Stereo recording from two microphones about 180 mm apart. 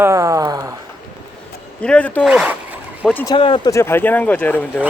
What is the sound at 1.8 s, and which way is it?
Speech, 5° left (ahead or behind).